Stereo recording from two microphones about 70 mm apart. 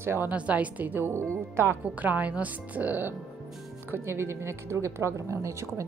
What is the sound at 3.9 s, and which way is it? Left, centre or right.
A woman's voice, right.